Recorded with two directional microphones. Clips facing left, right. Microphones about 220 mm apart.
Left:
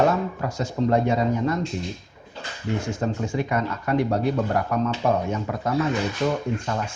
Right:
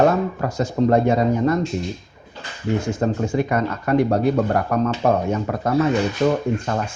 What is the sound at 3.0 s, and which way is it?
Speech, 45° right (ahead or behind).